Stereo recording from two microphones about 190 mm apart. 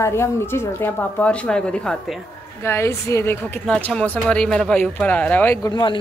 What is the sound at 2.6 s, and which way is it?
Speech, 15° left (ahead or behind).